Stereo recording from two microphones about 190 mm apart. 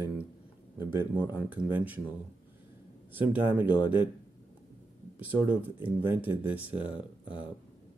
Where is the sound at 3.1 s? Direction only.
10° right (ahead or behind).